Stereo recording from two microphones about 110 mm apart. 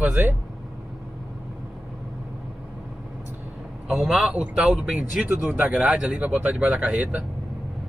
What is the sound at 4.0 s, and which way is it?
Speech, 5° right (ahead or behind).